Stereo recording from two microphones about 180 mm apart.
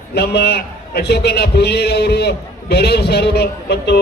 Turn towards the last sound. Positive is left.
turn(degrees=65)  # may be behind; listen again after turning